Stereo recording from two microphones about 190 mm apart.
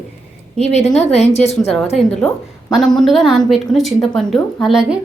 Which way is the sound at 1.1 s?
35° left (ahead or behind).